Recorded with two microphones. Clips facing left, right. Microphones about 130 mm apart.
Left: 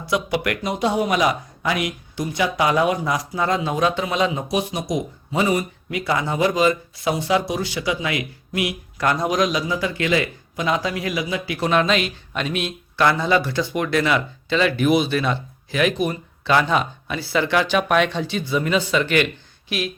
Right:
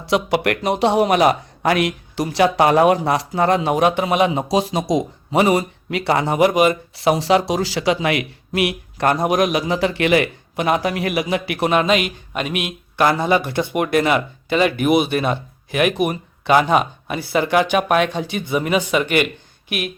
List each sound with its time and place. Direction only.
0.0 s speech: 65° right (ahead or behind); by 2.5 s 85° right
2.6 s speech: 50° right (ahead or behind); by 4.5 s 70° right (ahead or behind)
4.6 s speech: 90° right; by 9.0 s 70° right (ahead or behind)
9.0 s speech: 55° right (ahead or behind)
11.6 s speech: 10° right (ahead or behind)
13.1 s speech: 50° right (ahead or behind)
13.8 s speech: 50° right (ahead or behind)
18.4 s speech: 15° right (ahead or behind)
19.2 s a sound: 55° right (ahead or behind)